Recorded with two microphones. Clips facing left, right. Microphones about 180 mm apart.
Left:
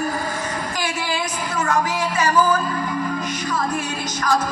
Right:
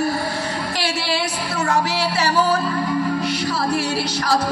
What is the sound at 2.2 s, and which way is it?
Speech, 35° right (ahead or behind).